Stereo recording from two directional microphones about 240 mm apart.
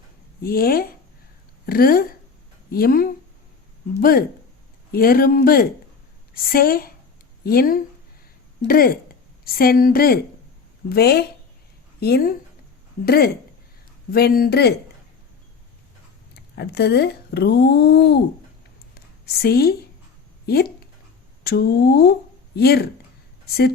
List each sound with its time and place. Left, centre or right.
0.4 s a woman's voice: left
4.9 s a woman's voice: left
16.3 s speech: left
19.2 s speech: left